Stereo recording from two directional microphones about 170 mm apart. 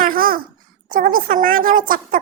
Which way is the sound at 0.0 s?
55° right (ahead or behind).